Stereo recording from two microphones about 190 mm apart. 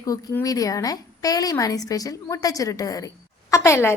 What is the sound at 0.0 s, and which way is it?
A woman's voice, 20° left (ahead or behind).